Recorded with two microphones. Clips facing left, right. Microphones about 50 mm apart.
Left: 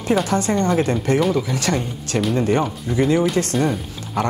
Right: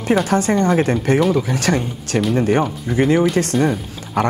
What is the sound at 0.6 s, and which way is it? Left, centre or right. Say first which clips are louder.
Speech: right 2 dB; centre.